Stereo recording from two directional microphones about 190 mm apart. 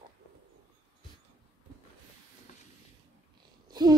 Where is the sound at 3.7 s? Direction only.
20° right (ahead or behind).